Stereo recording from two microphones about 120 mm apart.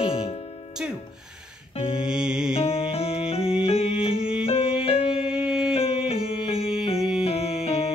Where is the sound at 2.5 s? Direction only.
50° left (ahead or behind).